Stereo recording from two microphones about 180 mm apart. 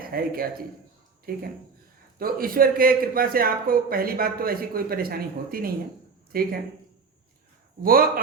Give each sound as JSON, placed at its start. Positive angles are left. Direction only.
{"t": 0.1, "sound": "a man's voice", "side_deg": -55}
{"t": 7.8, "sound": "a man's voice", "side_deg": -55}